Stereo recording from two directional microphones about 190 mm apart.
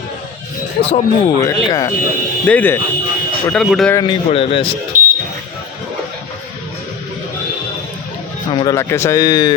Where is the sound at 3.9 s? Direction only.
20° left (ahead or behind).